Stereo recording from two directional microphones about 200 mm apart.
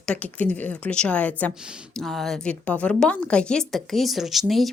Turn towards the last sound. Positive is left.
turn(degrees=0)  # may be behind; listen again after turning